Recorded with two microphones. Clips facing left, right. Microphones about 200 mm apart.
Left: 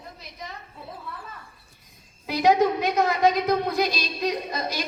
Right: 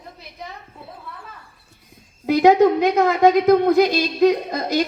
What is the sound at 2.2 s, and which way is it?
A woman's voice, 55° right (ahead or behind).